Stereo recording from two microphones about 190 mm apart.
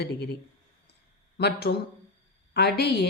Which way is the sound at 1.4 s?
55° left (ahead or behind).